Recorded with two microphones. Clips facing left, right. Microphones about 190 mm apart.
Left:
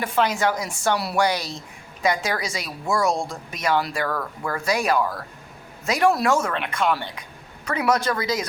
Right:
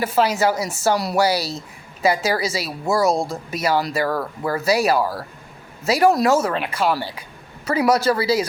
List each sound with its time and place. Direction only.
0.0 s a woman's voice: 5° right (ahead or behind)
1.3 s speech: 35° right (ahead or behind)
2.0 s a woman's voice: 5° right (ahead or behind)
4.1 s speech: 35° right (ahead or behind)
7.9 s speech: 10° right (ahead or behind)
8.1 s speech: 30° right (ahead or behind)